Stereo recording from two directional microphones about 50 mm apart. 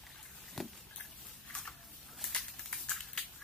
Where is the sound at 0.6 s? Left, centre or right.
Centre.